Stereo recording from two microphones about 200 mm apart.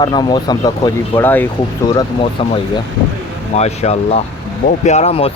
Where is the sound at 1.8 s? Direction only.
25° left (ahead or behind).